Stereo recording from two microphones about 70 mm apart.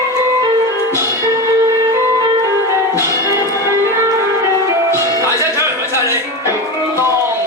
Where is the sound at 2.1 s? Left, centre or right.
Right.